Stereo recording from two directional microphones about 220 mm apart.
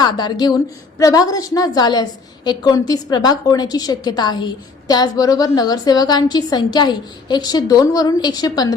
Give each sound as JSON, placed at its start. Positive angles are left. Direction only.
{"t": 0.0, "sound": "a woman's voice", "side_deg": 20}